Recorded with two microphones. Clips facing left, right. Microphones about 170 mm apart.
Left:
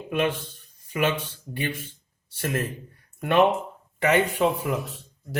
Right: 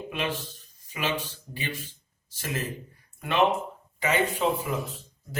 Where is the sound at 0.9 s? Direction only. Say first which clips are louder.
Left 5 dB; 55° left (ahead or behind).